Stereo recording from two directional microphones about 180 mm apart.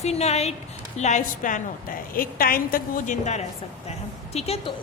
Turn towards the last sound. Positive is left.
turn(degrees=35)  # may be behind; listen again after turning